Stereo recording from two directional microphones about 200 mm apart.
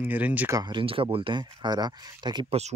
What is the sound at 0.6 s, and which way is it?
Speech, 25° right (ahead or behind).